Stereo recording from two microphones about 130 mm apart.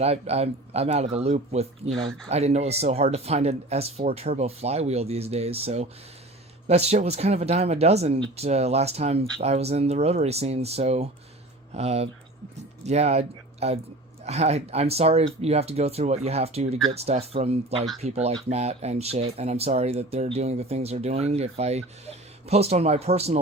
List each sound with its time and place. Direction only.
0.0 s speech: 55° right (ahead or behind)
1.9 s speech: centre (ahead or behind)
2.3 s speech: 55° right (ahead or behind)